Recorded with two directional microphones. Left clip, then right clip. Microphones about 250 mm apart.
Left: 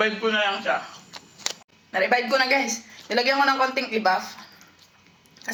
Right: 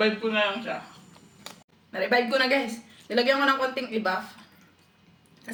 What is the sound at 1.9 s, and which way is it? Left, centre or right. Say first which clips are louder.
A man's voice: left 3 dB; centre.